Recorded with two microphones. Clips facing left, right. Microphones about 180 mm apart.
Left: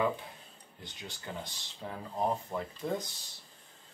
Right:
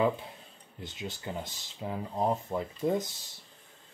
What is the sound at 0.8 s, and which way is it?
Speech, 25° right (ahead or behind).